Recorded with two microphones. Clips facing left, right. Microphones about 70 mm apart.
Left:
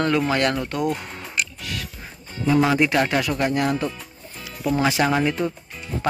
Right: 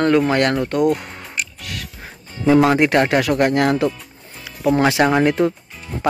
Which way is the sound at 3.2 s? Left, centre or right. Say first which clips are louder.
Right 6 dB; right.